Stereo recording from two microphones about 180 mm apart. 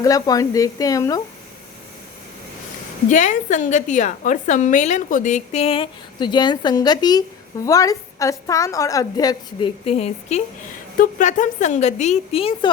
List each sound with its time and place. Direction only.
0.0 s a woman's voice: 20° left (ahead or behind)
3.1 s a woman's voice: 45° left (ahead or behind); by 9.6 s 20° left (ahead or behind)
9.8 s a woman's voice: 35° left (ahead or behind)
10.9 s a woman's voice: 50° left (ahead or behind); by 12.7 s 30° left (ahead or behind)